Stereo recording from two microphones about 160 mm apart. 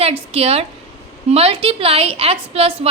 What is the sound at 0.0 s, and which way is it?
A woman's voice, 40° right (ahead or behind).